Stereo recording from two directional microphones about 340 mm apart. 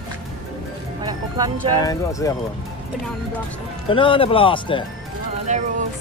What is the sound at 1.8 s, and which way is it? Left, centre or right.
Speech, centre.